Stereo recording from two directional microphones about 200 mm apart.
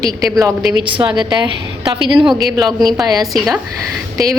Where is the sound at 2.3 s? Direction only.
Centre (ahead or behind).